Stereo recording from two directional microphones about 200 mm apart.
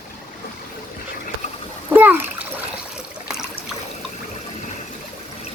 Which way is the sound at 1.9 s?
10° right (ahead or behind).